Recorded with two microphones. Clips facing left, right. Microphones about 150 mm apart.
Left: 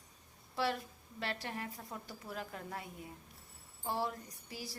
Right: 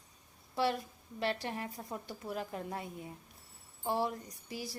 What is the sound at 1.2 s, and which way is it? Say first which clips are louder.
A woman's voice: right 5 dB; 20° right (ahead or behind).